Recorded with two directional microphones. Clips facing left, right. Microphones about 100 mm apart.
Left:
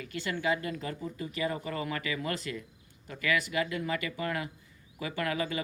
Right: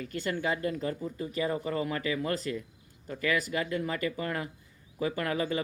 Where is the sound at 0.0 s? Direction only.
40° right (ahead or behind).